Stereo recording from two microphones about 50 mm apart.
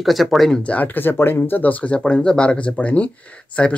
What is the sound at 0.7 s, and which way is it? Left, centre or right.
Speech, left.